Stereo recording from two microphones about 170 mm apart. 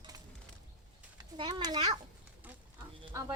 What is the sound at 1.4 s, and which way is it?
Speech, 30° right (ahead or behind).